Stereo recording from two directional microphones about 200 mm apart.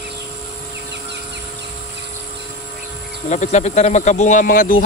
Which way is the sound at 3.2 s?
35° left (ahead or behind).